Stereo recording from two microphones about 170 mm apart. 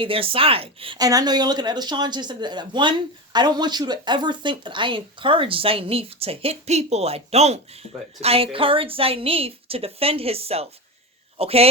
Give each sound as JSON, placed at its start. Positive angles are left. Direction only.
{"t": 0.0, "sound": "a woman's voice", "side_deg": -35}